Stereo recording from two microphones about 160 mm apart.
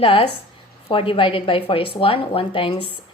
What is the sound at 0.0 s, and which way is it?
A woman's voice, 35° left (ahead or behind).